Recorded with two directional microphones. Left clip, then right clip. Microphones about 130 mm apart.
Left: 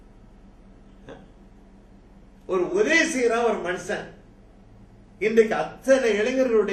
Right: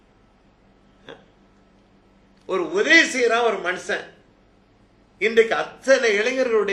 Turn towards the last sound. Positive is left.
turn(degrees=-25)  # may be behind; listen again after turning